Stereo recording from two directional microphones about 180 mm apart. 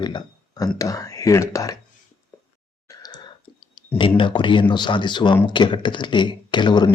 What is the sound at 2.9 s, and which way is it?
Clicking, 20° left (ahead or behind).